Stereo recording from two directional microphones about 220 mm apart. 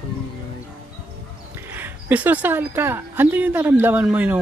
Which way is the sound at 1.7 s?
10° right (ahead or behind).